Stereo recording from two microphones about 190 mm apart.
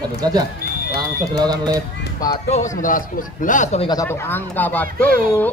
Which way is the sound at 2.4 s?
40° left (ahead or behind).